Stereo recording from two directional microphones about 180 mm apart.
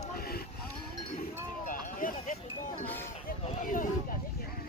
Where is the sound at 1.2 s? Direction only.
50° left (ahead or behind).